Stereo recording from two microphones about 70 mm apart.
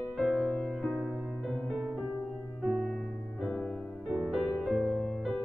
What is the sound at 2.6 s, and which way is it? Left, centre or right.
Music, centre.